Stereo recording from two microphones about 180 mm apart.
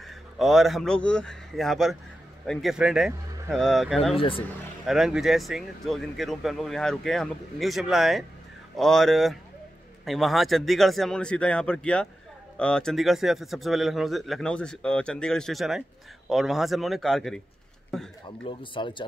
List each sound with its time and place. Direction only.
0.0 s speech: centre (ahead or behind)
18.4 s speech: 25° left (ahead or behind)